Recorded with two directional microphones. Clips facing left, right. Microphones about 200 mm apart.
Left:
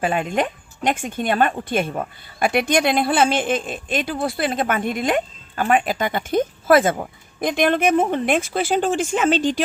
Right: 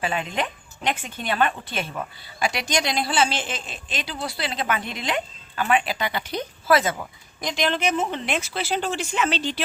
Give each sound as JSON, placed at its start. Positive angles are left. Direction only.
{"t": 0.0, "sound": "a woman's voice", "side_deg": 50}